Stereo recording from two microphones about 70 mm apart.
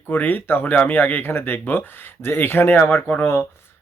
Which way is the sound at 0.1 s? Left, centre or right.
Left.